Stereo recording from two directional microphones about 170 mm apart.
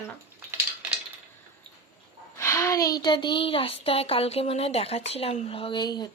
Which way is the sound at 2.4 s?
20° left (ahead or behind).